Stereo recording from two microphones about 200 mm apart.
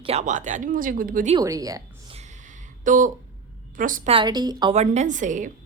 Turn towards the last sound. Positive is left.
turn(degrees=-40)  # may be behind; listen again after turning